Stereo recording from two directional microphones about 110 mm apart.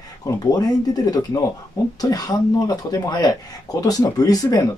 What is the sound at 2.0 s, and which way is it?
Speech, 35° left (ahead or behind).